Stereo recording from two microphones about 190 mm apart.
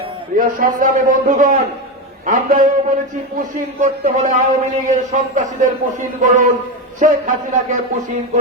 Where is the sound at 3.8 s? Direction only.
40° right (ahead or behind).